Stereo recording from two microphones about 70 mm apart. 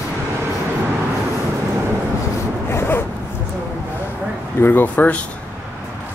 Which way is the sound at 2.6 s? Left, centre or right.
Left.